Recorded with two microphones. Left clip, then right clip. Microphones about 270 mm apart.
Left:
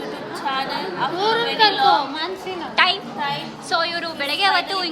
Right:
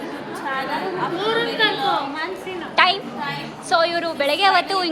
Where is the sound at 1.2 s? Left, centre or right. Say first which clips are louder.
Left 3 dB; left.